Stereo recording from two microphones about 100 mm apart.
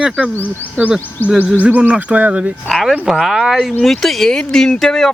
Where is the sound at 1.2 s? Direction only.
20° left (ahead or behind).